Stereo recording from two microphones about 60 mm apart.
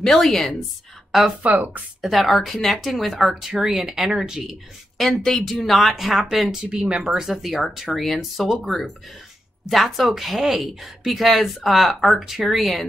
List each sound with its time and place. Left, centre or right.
0.0 s speech: centre
1.4 s speech: right
2.0 s speech: centre
4.4 s speech: centre
6.6 s speech: centre